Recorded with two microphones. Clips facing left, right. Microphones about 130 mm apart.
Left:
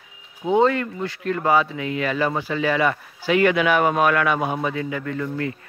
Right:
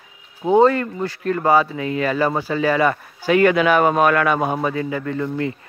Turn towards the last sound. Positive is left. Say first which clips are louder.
# right 3 dB
turn(degrees=-30)  # may be behind; listen again after turning